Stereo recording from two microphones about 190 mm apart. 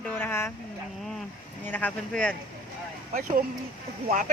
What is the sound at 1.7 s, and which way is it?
Speech, 10° left (ahead or behind).